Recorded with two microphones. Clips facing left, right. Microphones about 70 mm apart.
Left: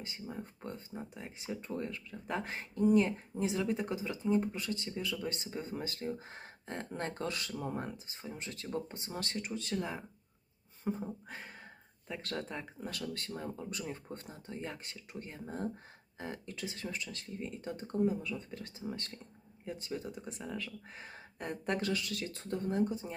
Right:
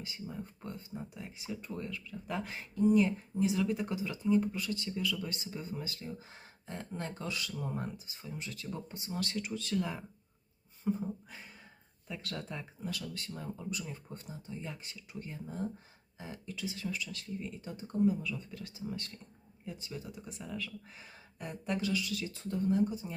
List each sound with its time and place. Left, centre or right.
0.0 s speech: left
10.8 s speech: left
11.3 s a sound: left
12.0 s speech: left